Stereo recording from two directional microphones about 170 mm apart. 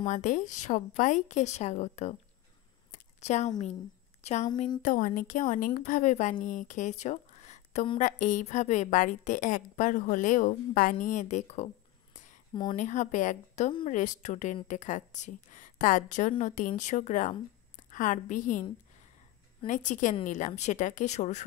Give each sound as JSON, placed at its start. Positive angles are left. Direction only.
{"t": 0.0, "sound": "a woman's voice", "side_deg": 45}
{"t": 2.9, "sound": "a sound", "side_deg": 40}
{"t": 4.2, "sound": "a woman's voice", "side_deg": 40}
{"t": 4.8, "sound": "a woman's voice", "side_deg": 55}